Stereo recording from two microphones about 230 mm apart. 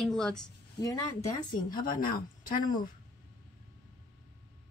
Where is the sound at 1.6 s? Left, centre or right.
Left.